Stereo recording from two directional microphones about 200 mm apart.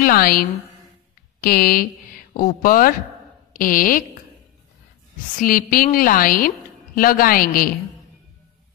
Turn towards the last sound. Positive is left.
turn(degrees=45)  # may be behind; listen again after turning